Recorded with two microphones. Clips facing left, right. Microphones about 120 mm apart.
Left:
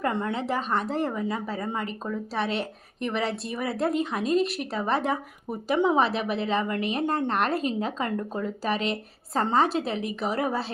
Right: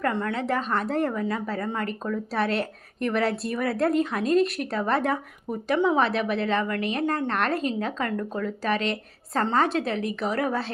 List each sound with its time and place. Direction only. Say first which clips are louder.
0.0 s speech: right 1 dB; 15° left (ahead or behind)
0.4 s speech: right 1 dB; 5° left (ahead or behind)
1.1 s speech: right 2 dB; 15° left (ahead or behind)
2.3 s speech: right 3 dB; centre (ahead or behind)
6.9 s speech: even; 25° left (ahead or behind)
7.3 s speech: even; 5° left (ahead or behind)